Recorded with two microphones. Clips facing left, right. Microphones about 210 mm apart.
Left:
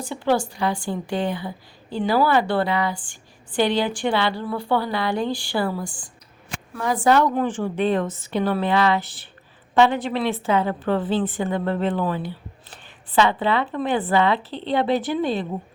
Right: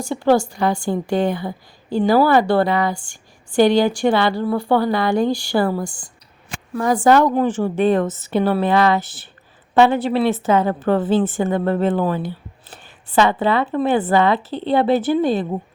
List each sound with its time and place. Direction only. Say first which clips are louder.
0.0 s a woman's voice: right 5 dB; 45° right (ahead or behind)